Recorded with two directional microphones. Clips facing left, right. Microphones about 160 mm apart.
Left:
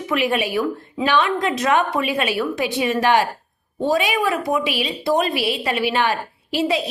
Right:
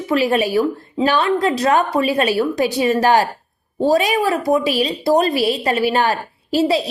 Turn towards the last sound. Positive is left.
turn(degrees=-40)  # may be behind; listen again after turning